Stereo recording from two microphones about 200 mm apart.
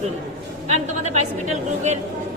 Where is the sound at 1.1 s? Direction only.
35° right (ahead or behind).